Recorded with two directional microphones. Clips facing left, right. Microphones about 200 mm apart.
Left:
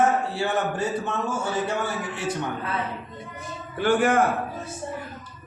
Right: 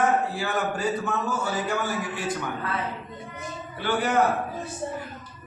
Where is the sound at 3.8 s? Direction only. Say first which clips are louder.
Left 5 dB; 50° left (ahead or behind).